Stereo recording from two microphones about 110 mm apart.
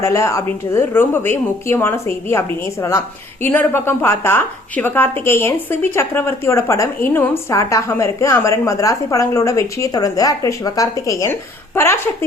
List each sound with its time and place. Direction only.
0.0 s a woman's voice: 25° left (ahead or behind)
3.4 s a woman's voice: 20° left (ahead or behind)